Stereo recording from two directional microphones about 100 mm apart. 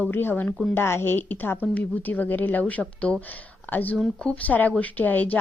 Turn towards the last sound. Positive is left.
turn(degrees=15)  # may be behind; listen again after turning